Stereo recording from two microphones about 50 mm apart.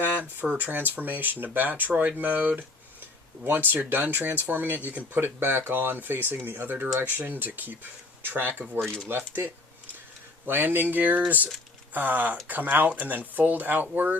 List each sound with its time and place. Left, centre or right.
0.0 s a sound: right
0.4 s speech: right
3.7 s speech: right
8.8 s speech: centre
9.0 s speech: right